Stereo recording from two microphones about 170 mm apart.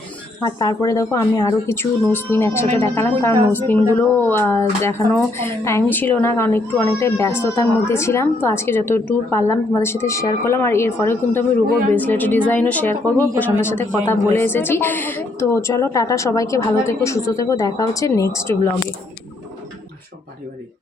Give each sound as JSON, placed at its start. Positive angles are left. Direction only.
{"t": 0.4, "sound": "speech", "side_deg": 25}